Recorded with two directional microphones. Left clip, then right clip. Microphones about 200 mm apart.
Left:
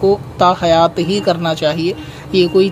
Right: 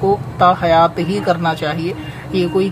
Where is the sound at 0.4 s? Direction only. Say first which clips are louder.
Even; 45° left (ahead or behind).